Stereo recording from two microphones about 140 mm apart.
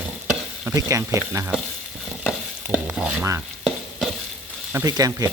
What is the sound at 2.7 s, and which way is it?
Frying, 10° right (ahead or behind).